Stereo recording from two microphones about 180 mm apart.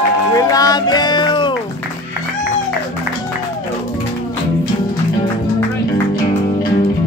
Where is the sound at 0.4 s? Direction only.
20° left (ahead or behind).